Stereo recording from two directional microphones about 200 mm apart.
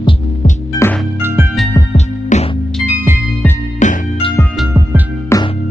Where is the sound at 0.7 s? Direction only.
10° left (ahead or behind).